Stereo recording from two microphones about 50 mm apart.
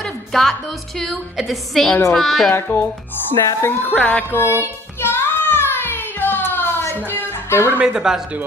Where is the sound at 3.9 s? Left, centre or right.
Centre.